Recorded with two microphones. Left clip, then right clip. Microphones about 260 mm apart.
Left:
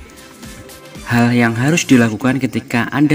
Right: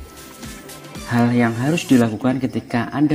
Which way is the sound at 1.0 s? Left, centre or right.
Left.